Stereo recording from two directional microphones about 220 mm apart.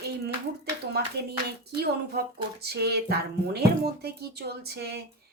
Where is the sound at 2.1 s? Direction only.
45° right (ahead or behind).